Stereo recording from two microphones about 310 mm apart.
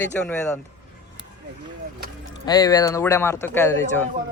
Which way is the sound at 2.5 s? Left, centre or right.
Centre.